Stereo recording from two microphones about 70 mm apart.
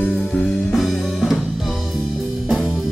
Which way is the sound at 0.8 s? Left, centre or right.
Centre.